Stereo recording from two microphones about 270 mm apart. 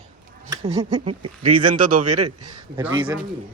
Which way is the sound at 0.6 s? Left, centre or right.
Right.